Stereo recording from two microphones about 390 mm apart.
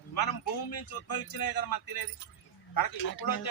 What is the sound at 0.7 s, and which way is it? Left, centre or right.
A man's voice, left.